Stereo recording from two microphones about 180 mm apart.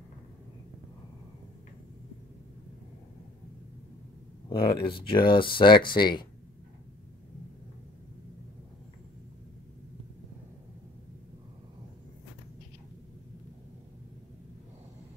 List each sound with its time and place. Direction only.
4.5 s speech: 30° left (ahead or behind)